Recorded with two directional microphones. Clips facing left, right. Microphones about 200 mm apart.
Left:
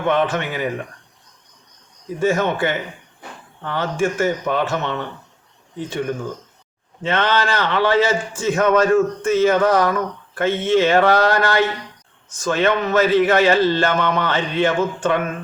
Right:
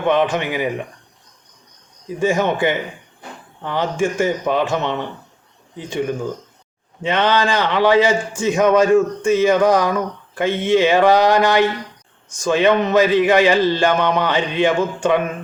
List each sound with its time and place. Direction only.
0.1 s a man's voice: 15° right (ahead or behind)
2.1 s a man's voice: 15° right (ahead or behind)